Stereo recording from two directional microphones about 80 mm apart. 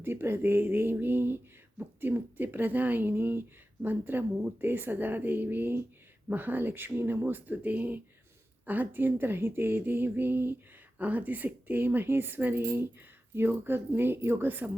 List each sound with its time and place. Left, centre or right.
0.0 s speech: right